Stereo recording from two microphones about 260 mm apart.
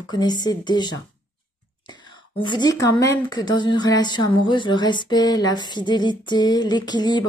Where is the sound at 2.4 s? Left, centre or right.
Centre.